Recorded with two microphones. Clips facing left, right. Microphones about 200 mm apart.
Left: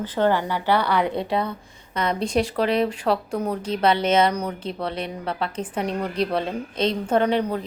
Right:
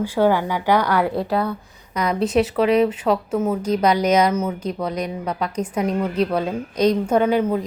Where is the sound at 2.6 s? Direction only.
35° left (ahead or behind).